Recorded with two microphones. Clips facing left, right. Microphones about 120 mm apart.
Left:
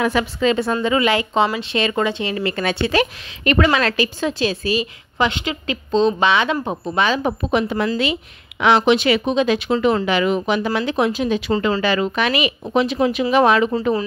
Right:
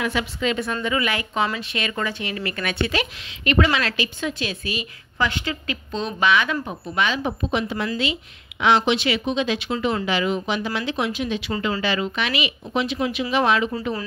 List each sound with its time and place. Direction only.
0.0 s a woman's voice: 40° left (ahead or behind)
2.9 s a woman's voice: 45° left (ahead or behind)
5.2 s a woman's voice: 20° left (ahead or behind)
6.6 s a woman's voice: 40° left (ahead or behind)
7.4 s a woman's voice: 50° left (ahead or behind)